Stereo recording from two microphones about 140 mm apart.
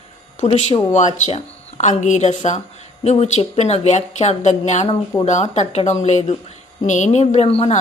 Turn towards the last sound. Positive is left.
turn(degrees=45)  # may be behind; listen again after turning